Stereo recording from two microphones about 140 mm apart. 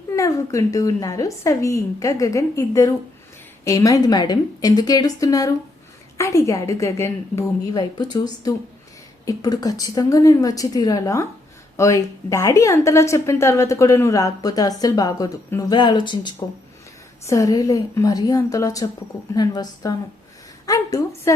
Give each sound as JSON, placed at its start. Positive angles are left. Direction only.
{"t": 0.2, "sound": "speech", "side_deg": 25}